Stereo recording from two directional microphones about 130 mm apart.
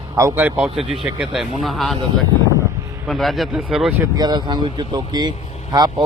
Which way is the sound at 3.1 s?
Centre (ahead or behind).